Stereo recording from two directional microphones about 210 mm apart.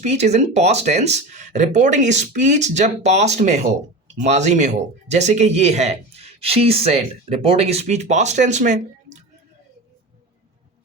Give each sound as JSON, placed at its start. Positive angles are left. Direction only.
{"t": 0.0, "sound": "speech", "side_deg": -30}